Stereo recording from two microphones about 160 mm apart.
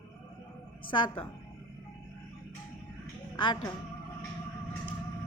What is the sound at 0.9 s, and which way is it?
Speech, 30° left (ahead or behind).